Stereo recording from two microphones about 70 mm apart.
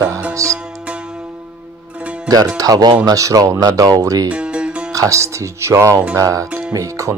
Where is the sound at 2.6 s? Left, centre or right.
Right.